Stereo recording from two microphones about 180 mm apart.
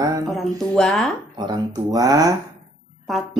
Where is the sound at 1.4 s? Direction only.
20° right (ahead or behind).